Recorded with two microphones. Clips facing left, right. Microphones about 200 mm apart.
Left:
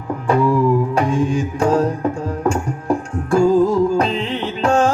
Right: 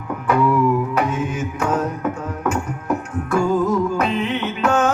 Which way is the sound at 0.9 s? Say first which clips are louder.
Left 4 dB; 30° left (ahead or behind).